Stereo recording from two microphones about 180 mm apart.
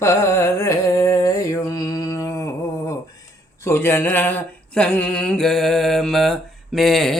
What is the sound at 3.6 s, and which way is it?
Mantra, 15° left (ahead or behind).